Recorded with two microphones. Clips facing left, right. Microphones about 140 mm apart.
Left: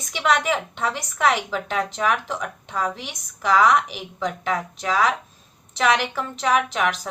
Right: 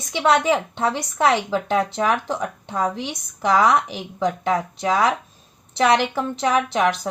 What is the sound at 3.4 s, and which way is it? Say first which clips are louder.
Speech: right 1 dB; 30° right (ahead or behind).